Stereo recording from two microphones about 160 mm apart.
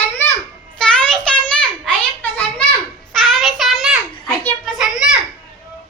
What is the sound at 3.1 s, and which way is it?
Child singing, centre (ahead or behind).